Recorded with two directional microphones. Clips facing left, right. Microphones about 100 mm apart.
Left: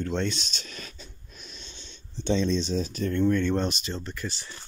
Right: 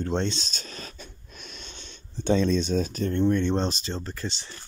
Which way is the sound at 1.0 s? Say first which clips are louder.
Right 3 dB; 65° right (ahead or behind).